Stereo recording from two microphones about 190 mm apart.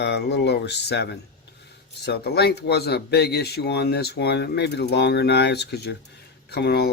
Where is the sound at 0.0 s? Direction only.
65° left (ahead or behind).